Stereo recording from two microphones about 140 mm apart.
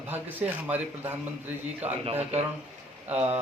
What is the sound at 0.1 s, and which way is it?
Speech, 15° right (ahead or behind).